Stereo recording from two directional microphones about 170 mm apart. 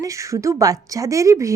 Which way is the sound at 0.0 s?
20° right (ahead or behind).